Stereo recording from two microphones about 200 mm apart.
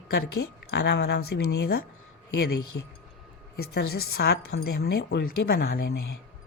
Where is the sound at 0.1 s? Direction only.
55° left (ahead or behind).